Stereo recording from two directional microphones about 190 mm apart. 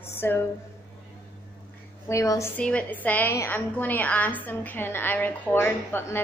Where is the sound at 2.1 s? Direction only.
15° left (ahead or behind).